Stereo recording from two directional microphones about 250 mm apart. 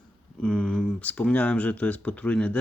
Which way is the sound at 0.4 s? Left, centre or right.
Centre.